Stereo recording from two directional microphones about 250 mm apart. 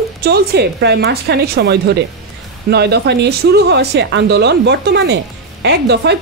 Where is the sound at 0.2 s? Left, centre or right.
Right.